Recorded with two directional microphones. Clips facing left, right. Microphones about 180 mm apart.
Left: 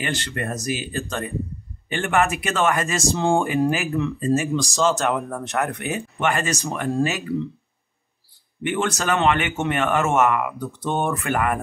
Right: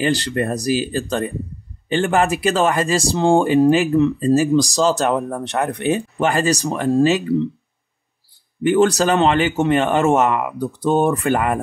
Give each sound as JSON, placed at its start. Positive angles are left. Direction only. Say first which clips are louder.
{"t": 0.0, "sound": "speech", "louder": "right 8 dB", "side_deg": -35}
{"t": 8.6, "sound": "speech", "louder": "right 8 dB", "side_deg": -35}